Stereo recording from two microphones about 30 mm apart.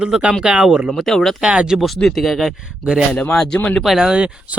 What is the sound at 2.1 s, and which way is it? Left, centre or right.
Speech, centre.